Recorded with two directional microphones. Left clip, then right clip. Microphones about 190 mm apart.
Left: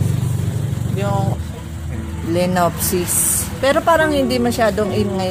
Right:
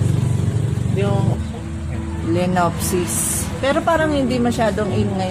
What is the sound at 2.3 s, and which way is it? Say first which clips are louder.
Music: left 2 dB; 45° left (ahead or behind).